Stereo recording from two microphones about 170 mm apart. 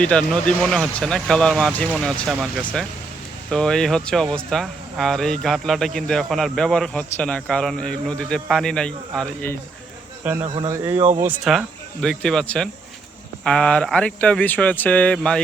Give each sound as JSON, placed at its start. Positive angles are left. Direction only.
{"t": 0.0, "sound": "speech", "side_deg": 5}
{"t": 10.5, "sound": "speech", "side_deg": -20}
{"t": 10.9, "sound": "speech", "side_deg": -40}
{"t": 11.5, "sound": "speech", "side_deg": 0}